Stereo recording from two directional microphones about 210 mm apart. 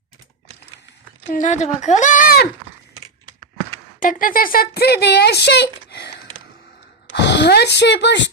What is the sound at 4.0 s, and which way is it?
Speech, 40° left (ahead or behind).